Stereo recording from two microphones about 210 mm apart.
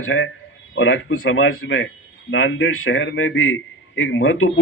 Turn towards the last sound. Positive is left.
turn(degrees=70)  # may be behind; listen again after turning